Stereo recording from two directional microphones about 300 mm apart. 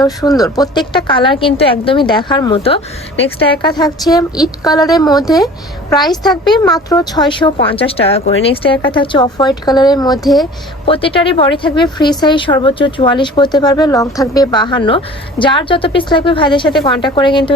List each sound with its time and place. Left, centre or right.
0.0 s a woman's voice: centre
10.2 s a woman's voice: centre
10.8 s a woman's voice: centre